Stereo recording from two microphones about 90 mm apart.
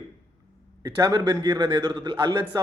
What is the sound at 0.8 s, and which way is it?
A man's voice, 45° right (ahead or behind).